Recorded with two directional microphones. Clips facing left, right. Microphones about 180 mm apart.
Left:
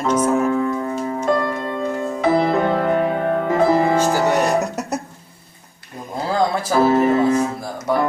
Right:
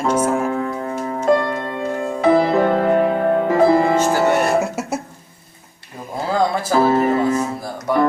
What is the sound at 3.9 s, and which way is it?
Music, 10° left (ahead or behind).